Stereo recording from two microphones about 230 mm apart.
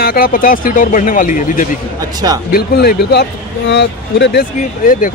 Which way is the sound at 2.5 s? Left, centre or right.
Left.